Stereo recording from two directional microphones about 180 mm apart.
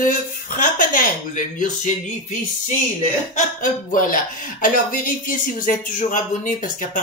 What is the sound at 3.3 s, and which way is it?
Speech, 45° left (ahead or behind).